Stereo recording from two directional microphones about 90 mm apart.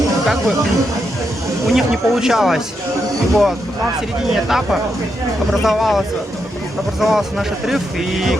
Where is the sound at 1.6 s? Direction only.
Centre (ahead or behind).